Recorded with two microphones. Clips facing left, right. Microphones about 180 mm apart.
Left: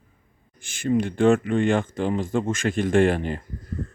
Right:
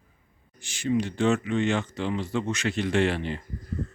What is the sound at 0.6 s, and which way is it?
Speech, 50° left (ahead or behind).